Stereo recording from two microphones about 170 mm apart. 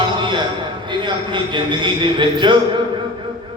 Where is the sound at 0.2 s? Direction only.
25° right (ahead or behind).